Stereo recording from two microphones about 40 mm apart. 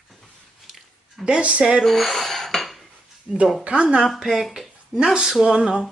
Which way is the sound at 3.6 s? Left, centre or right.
Right.